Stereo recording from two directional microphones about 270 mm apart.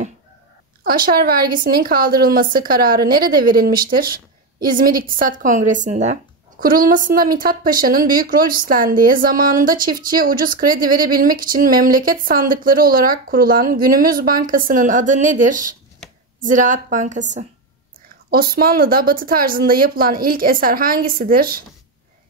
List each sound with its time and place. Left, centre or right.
0.8 s a woman's voice: right